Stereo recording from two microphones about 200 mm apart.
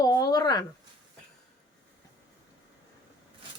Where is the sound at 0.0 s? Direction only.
20° left (ahead or behind).